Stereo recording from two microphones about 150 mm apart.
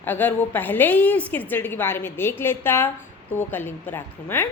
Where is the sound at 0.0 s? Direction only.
10° left (ahead or behind).